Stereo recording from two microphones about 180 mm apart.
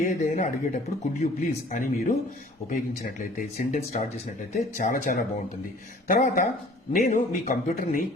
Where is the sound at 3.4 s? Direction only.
45° left (ahead or behind).